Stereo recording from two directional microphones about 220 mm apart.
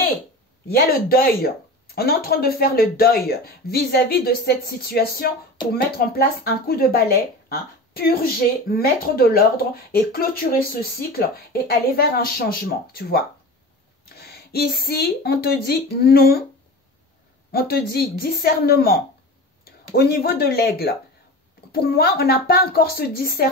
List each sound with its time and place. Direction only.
0.7 s speech: 45° left (ahead or behind)
17.5 s speech: 45° left (ahead or behind)